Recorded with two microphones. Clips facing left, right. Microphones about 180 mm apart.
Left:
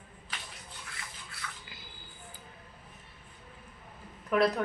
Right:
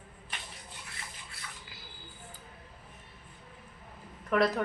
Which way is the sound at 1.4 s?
30° right (ahead or behind).